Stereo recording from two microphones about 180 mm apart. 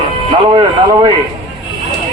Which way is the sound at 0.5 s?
25° right (ahead or behind).